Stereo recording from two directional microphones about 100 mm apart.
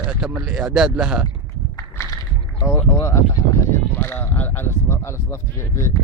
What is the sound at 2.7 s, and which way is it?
Speech, 25° left (ahead or behind).